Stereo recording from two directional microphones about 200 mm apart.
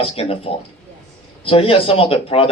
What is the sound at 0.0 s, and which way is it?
Speech, 30° left (ahead or behind).